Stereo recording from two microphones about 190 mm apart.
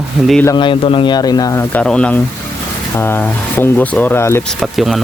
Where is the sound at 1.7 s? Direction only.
5° left (ahead or behind).